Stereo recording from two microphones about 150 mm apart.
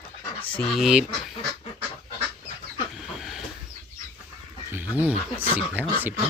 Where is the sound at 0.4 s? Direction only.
5° left (ahead or behind).